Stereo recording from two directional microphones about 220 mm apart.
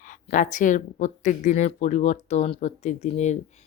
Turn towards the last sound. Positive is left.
turn(degrees=30)  # may be behind; listen again after turning